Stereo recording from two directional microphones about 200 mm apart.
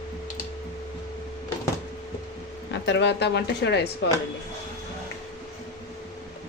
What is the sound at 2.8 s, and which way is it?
Speech, 60° left (ahead or behind).